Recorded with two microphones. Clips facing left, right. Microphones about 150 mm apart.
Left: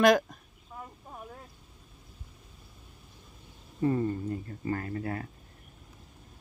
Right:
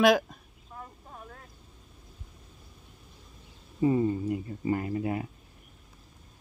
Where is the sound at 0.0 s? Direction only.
Centre (ahead or behind).